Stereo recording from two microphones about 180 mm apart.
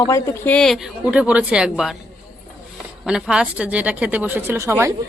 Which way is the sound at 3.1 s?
5° right (ahead or behind).